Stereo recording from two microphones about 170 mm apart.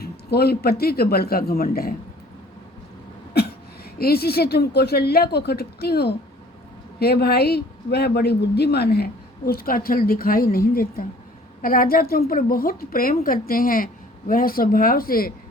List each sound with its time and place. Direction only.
0.0 s speech: 65° left (ahead or behind)
3.3 s a sound: 70° left (ahead or behind)
3.9 s a woman's voice: 65° left (ahead or behind)